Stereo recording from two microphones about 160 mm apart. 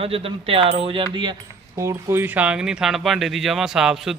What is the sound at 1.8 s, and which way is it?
Speech, 20° right (ahead or behind).